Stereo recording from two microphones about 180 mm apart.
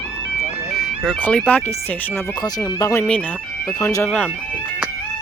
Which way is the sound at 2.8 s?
15° left (ahead or behind).